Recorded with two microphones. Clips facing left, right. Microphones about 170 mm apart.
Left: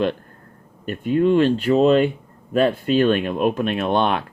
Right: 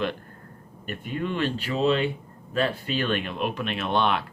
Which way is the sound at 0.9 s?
45° left (ahead or behind).